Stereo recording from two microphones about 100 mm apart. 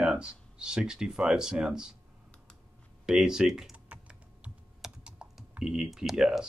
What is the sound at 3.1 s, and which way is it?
Typing, 5° right (ahead or behind).